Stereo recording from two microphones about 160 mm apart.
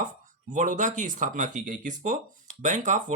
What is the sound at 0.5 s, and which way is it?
Speech, 50° right (ahead or behind).